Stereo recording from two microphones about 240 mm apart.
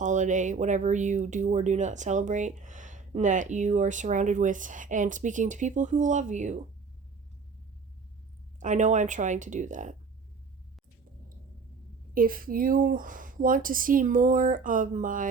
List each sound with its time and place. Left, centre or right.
0.0 s speech: right
8.6 s speech: right
12.1 s speech: right